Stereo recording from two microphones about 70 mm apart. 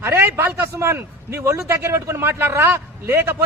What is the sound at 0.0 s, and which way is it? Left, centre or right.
A man's voice, right.